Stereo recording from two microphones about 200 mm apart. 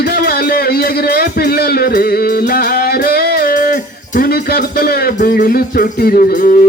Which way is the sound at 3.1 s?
50° left (ahead or behind).